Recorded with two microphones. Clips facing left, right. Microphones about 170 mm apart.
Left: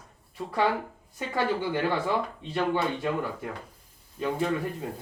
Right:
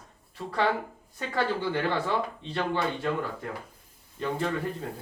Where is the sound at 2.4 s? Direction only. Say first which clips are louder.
Left 2 dB; 10° left (ahead or behind).